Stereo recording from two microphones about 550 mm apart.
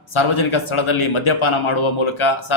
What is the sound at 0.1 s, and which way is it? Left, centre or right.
A man's voice, left.